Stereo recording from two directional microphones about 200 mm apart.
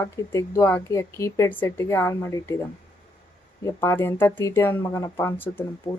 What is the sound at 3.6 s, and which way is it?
Speech, 10° left (ahead or behind).